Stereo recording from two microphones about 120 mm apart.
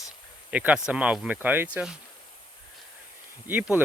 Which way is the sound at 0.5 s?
10° right (ahead or behind).